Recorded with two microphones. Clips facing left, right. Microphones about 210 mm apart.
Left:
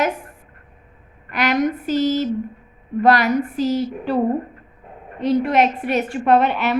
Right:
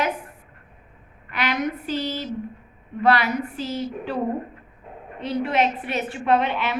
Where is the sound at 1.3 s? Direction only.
45° left (ahead or behind).